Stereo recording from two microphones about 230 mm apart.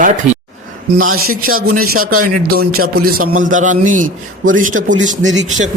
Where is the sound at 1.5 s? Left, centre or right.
Right.